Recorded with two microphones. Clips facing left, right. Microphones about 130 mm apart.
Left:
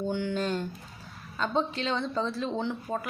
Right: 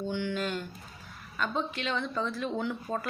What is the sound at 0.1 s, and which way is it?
A woman's voice, 35° left (ahead or behind).